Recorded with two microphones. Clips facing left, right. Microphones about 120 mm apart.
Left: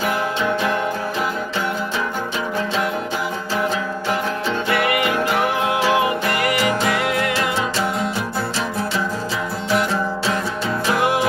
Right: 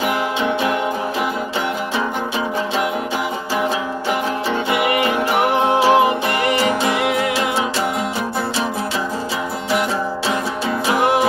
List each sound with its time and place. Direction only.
4.6 s music: 20° right (ahead or behind)